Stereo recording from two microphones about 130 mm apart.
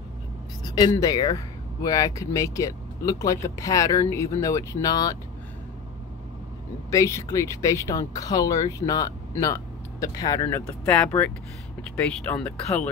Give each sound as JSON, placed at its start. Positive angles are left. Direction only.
{"t": 0.7, "sound": "speech", "side_deg": 30}
{"t": 6.9, "sound": "speech", "side_deg": 25}
{"t": 12.4, "sound": "speech", "side_deg": 10}